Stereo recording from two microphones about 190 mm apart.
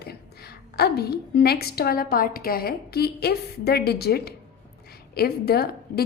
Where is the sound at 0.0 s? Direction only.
55° left (ahead or behind).